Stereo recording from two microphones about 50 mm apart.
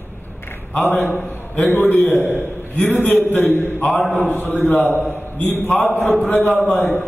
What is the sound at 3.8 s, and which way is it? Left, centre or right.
Speech, centre.